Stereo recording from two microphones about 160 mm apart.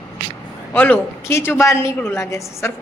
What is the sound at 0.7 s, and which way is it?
A woman's voice, 10° left (ahead or behind).